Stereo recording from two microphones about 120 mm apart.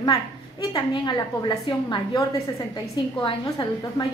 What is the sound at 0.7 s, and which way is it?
A woman's voice, 35° left (ahead or behind).